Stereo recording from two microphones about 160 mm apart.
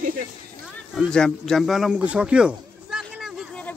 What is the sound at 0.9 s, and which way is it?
Speech, 5° left (ahead or behind).